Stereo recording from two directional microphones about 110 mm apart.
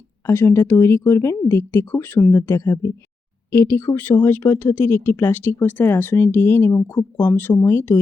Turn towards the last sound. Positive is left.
turn(degrees=20)  # may be behind; listen again after turning